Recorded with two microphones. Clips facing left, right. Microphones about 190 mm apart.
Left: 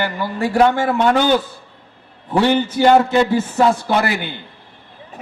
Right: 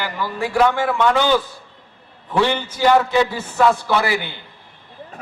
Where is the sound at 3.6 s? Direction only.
25° left (ahead or behind).